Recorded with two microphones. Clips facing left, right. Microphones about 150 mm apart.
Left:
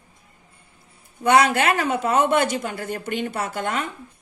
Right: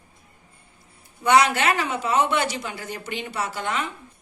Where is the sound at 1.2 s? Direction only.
50° left (ahead or behind).